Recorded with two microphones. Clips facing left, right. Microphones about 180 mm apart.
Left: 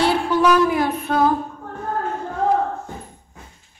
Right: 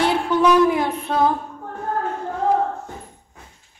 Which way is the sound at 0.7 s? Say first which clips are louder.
Even; 25° right (ahead or behind).